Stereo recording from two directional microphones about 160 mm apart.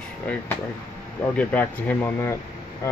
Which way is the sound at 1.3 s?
10° left (ahead or behind).